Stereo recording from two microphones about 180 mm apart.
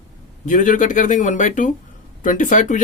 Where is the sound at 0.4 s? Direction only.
45° left (ahead or behind).